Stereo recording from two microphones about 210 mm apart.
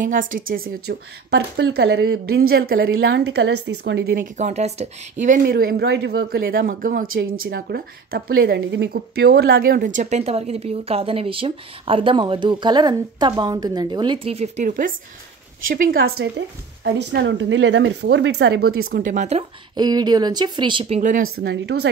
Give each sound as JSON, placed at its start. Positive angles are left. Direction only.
{"t": 0.0, "sound": "a woman's voice", "side_deg": -40}
{"t": 2.9, "sound": "a woman's voice", "side_deg": -65}
{"t": 7.1, "sound": "speech", "side_deg": -75}
{"t": 7.4, "sound": "a woman's voice", "side_deg": -45}
{"t": 21.0, "sound": "a woman's voice", "side_deg": -40}